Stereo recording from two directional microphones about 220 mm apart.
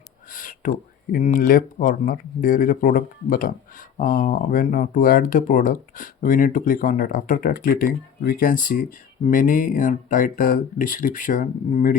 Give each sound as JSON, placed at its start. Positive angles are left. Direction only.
{"t": 0.3, "sound": "speech", "side_deg": 40}